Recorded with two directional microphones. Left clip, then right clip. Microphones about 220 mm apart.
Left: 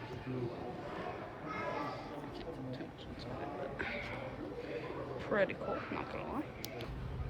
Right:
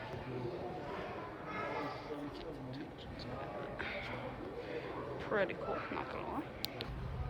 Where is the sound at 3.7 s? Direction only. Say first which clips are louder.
Left 1 dB; 5° right (ahead or behind).